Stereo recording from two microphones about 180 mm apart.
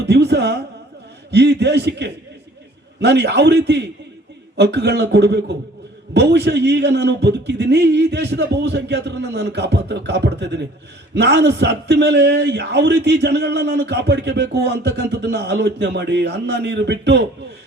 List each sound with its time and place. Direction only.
0.0 s a man's voice: 70° right (ahead or behind)